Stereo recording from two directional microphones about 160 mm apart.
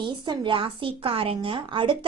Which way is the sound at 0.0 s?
30° right (ahead or behind).